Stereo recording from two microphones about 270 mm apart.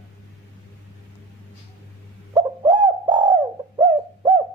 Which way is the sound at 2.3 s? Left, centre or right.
Centre.